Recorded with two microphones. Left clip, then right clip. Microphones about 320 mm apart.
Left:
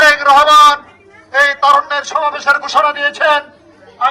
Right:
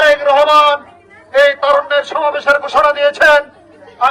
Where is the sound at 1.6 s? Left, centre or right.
Centre.